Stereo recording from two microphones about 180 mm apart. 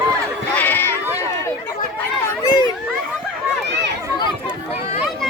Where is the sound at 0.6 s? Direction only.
10° left (ahead or behind).